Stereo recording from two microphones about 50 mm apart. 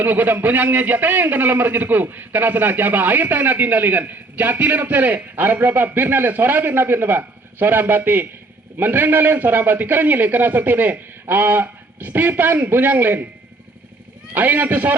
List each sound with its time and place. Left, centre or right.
0.0 s a man's voice: right
14.3 s a man's voice: right